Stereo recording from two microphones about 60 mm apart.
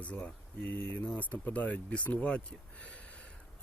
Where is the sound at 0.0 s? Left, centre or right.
Left.